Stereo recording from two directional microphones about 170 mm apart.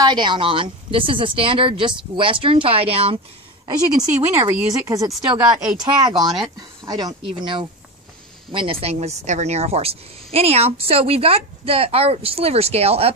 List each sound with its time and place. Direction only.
0.0 s speech: 25° right (ahead or behind)
3.6 s speech: 20° right (ahead or behind)
6.1 s speech: centre (ahead or behind)
6.8 s speech: 25° right (ahead or behind)